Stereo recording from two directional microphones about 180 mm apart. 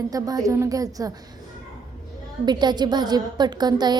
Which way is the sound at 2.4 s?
25° right (ahead or behind).